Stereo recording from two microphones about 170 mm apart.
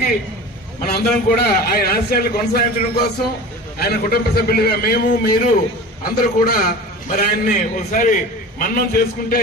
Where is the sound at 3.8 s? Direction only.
65° left (ahead or behind).